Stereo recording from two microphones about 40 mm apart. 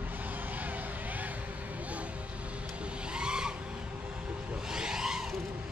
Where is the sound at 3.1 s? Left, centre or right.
Right.